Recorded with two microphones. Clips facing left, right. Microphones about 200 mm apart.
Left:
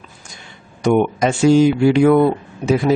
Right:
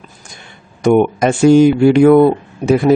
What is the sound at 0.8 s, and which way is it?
Speech, 50° right (ahead or behind).